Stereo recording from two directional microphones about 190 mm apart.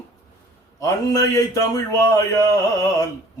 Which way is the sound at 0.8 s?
15° left (ahead or behind).